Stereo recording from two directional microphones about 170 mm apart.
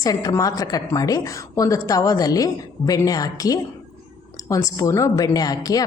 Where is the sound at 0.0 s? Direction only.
20° left (ahead or behind).